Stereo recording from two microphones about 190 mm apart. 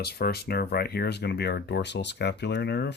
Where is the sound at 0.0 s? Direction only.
55° left (ahead or behind).